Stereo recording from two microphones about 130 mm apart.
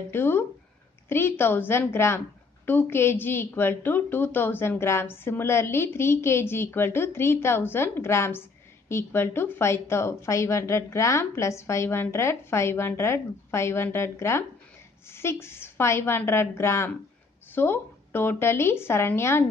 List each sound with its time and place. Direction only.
0.1 s a woman's voice: 15° left (ahead or behind)